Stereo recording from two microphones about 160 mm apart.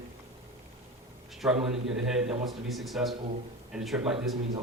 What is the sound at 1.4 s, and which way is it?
Speech, 5° right (ahead or behind).